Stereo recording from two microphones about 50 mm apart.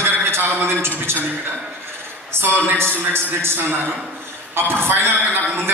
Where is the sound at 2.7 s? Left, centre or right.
Right.